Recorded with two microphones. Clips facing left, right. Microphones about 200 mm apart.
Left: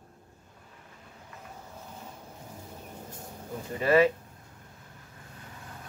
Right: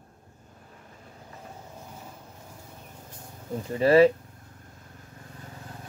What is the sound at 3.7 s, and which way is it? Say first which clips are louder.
Speech: right 5 dB; 30° right (ahead or behind).